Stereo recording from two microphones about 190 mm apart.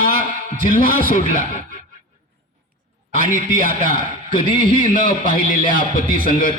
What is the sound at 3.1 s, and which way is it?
A man's voice, 45° left (ahead or behind).